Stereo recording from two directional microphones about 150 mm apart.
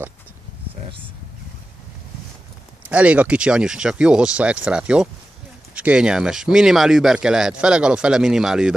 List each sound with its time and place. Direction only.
2.9 s speech: 10° right (ahead or behind)